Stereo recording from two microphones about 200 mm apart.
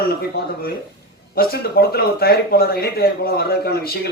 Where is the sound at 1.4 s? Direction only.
50° left (ahead or behind).